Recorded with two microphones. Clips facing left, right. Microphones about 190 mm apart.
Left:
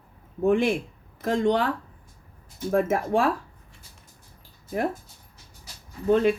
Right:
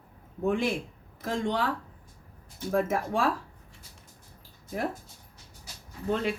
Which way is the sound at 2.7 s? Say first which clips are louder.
Left 5 dB; 55° left (ahead or behind).